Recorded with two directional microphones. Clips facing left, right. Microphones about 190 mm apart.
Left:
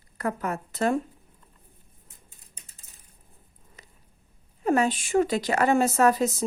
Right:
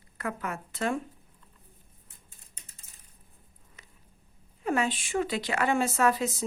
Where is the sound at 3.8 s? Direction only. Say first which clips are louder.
Left 4 dB; 35° left (ahead or behind).